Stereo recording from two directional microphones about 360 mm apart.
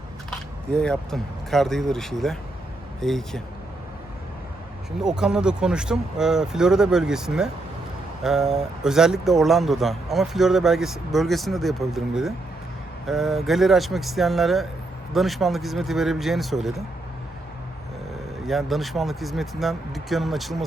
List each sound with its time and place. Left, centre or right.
0.3 s speech: centre
4.9 s speech: centre
18.4 s speech: centre